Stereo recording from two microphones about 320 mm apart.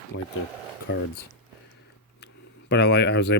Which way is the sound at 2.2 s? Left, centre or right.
Left.